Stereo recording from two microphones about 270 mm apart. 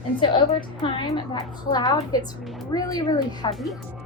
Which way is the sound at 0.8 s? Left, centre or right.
Centre.